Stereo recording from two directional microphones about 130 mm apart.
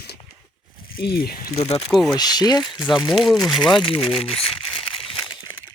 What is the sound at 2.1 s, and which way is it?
Speech, 30° left (ahead or behind).